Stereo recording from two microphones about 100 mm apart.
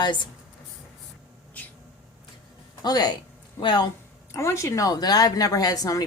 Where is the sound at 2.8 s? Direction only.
40° left (ahead or behind).